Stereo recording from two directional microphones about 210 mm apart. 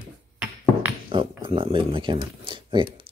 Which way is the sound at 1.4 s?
25° right (ahead or behind).